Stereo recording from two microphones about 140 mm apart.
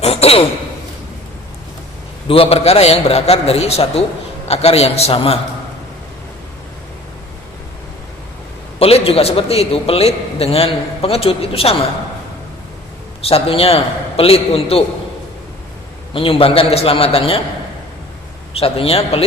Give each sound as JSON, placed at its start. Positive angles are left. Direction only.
{"t": 0.0, "sound": "a sound", "side_deg": 45}
{"t": 2.2, "sound": "a man's voice", "side_deg": 40}
{"t": 8.8, "sound": "a man's voice", "side_deg": 45}
{"t": 13.2, "sound": "a man's voice", "side_deg": 45}
{"t": 16.1, "sound": "a man's voice", "side_deg": 40}
{"t": 18.5, "sound": "a man's voice", "side_deg": 45}